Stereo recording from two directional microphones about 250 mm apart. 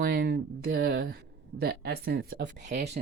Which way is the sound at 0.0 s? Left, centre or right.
Right.